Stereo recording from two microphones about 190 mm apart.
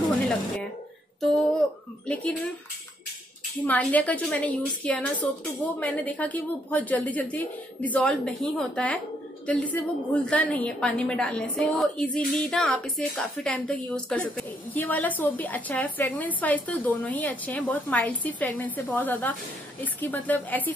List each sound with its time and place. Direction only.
2.0 s a woman's voice: 5° left (ahead or behind)
3.6 s a woman's voice: 10° left (ahead or behind)